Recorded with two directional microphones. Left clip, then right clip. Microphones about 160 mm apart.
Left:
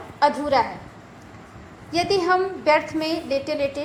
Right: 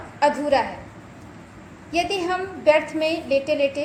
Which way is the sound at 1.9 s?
25° left (ahead or behind).